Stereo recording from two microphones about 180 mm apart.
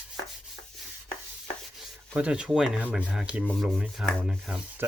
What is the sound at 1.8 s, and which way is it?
Speech, 5° right (ahead or behind).